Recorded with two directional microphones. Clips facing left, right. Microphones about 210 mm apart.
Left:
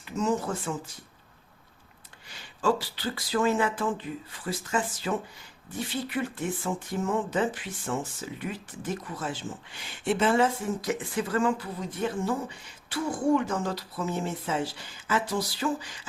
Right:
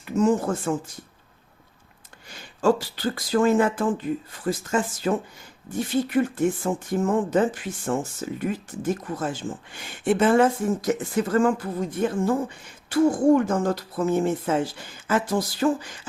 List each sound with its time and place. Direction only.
0.0 s speech: 50° right (ahead or behind)
2.3 s speech: 45° right (ahead or behind)